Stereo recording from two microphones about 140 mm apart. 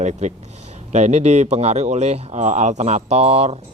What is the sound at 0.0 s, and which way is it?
Speech, 55° right (ahead or behind).